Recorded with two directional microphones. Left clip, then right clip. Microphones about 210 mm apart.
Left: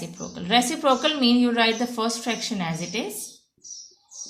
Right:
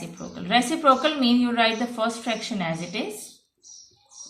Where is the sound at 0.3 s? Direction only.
45° left (ahead or behind).